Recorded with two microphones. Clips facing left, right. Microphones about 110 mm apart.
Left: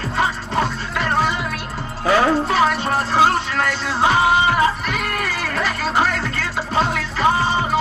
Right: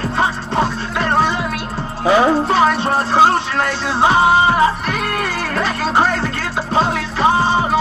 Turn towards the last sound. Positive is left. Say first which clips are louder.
# right 3 dB
turn(degrees=-30)  # may be behind; listen again after turning